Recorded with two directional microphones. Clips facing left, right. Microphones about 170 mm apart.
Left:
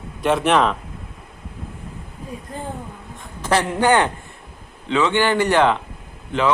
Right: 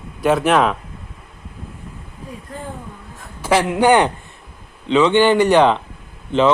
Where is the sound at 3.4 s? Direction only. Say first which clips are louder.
Right 3 dB; 10° right (ahead or behind).